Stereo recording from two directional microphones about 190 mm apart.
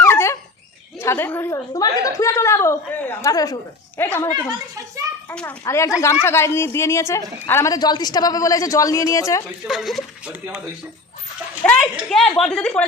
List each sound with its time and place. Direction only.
0.0 s dog: 15° left (ahead or behind)
0.9 s a woman's voice: 15° left (ahead or behind)
9.6 s speech: centre (ahead or behind)
11.6 s speech: 5° left (ahead or behind)